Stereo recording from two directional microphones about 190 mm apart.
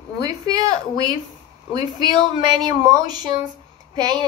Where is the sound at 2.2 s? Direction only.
20° right (ahead or behind).